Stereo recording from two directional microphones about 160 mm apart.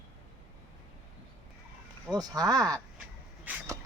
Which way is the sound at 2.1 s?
25° right (ahead or behind).